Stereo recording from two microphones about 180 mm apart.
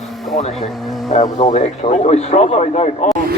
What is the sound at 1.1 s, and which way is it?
A man's voice, 40° left (ahead or behind).